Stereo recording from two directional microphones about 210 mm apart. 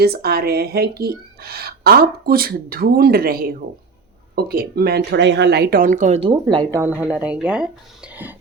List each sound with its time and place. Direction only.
0.0 s speech: 50° right (ahead or behind); by 8.4 s 10° right (ahead or behind)